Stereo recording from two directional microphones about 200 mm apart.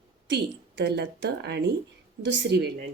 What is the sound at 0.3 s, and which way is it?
Speech, 60° right (ahead or behind).